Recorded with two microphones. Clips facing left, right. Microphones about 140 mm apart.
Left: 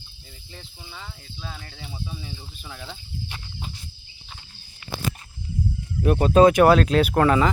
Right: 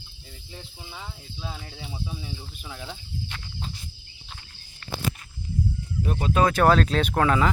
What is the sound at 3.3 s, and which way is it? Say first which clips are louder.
Insect: even; 10° left (ahead or behind).